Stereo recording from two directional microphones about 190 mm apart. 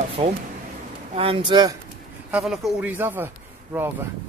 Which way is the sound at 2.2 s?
5° right (ahead or behind).